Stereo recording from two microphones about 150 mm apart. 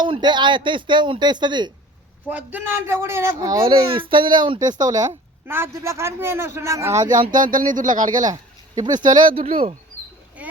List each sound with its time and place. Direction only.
0.0 s speech: 30° right (ahead or behind)
2.3 s speech: 15° right (ahead or behind)
7.1 s speech: 60° right (ahead or behind)
8.3 s speech: 25° right (ahead or behind)
9.2 s speech: 40° right (ahead or behind)
10.4 s a sound: 10° right (ahead or behind)